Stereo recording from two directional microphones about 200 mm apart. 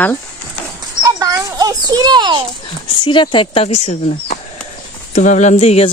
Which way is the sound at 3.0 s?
25° left (ahead or behind).